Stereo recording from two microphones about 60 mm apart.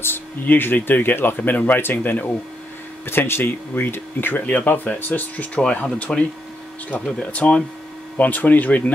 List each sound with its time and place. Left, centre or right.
0.0 s speech: left
4.5 s speech: left